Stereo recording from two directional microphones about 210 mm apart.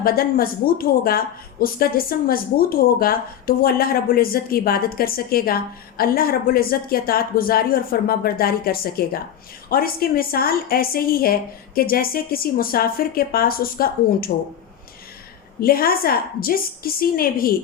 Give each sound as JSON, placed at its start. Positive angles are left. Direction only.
{"t": 0.0, "sound": "a woman's voice", "side_deg": 45}
{"t": 15.6, "sound": "a woman's voice", "side_deg": 45}